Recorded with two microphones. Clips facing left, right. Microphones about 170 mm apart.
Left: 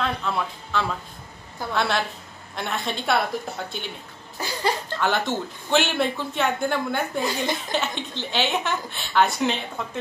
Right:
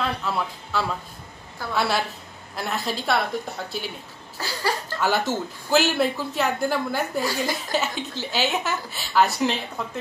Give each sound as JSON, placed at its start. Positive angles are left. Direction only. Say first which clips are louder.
{"t": 0.0, "sound": "speech", "louder": "even", "side_deg": -5}
{"t": 4.4, "sound": "a sound", "louder": "left 1 dB", "side_deg": 20}
{"t": 5.0, "sound": "speech", "louder": "right 1 dB", "side_deg": -5}